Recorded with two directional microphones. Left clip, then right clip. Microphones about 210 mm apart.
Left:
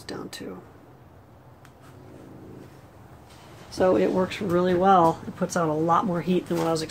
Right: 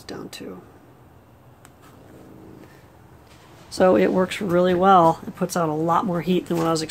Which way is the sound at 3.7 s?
30° right (ahead or behind).